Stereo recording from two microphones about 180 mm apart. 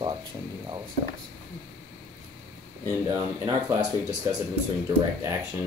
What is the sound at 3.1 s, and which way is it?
Speech, 20° right (ahead or behind).